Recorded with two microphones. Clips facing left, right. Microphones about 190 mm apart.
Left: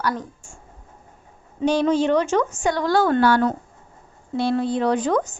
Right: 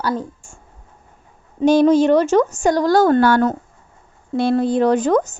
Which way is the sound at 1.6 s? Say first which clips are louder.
Right 6 dB; 45° right (ahead or behind).